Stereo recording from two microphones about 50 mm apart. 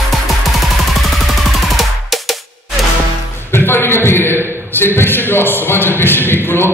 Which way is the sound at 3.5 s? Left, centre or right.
Left.